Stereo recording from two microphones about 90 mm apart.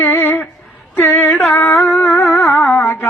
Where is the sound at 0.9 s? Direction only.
25° left (ahead or behind).